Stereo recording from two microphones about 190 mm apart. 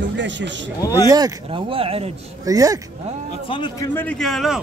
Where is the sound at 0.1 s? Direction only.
70° right (ahead or behind).